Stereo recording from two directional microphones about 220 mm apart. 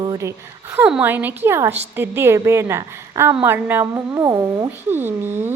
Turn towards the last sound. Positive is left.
turn(degrees=-10)  # may be behind; listen again after turning